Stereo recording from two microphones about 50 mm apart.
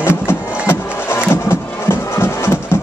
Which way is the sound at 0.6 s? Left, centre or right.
Left.